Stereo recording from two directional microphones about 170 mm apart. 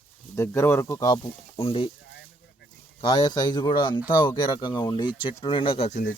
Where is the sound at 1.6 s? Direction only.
35° left (ahead or behind).